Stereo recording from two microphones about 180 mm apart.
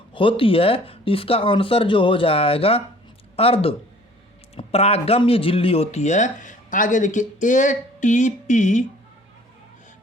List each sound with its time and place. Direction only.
0.1 s speech: 30° left (ahead or behind)